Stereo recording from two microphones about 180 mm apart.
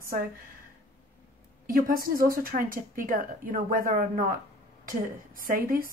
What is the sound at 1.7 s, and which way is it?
A woman's voice, 50° right (ahead or behind).